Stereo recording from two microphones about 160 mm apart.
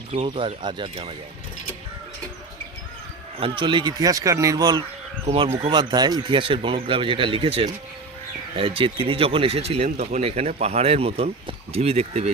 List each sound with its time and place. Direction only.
0.1 s speech: 35° right (ahead or behind)
3.3 s a man's voice: 35° right (ahead or behind)
5.2 s speech: 35° right (ahead or behind)
5.7 s speech: 25° right (ahead or behind)